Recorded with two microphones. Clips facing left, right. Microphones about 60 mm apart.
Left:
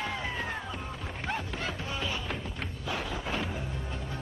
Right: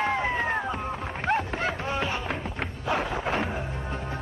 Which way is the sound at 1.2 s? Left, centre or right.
Right.